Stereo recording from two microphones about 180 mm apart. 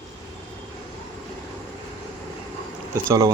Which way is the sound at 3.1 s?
15° right (ahead or behind).